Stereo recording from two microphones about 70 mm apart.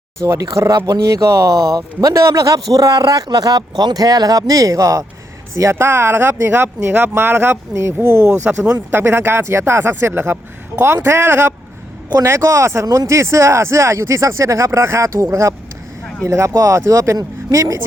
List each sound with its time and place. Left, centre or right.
0.3 s speech: right
5.7 s speech: right
8.3 s speech: centre
8.9 s speech: right
12.4 s speech: right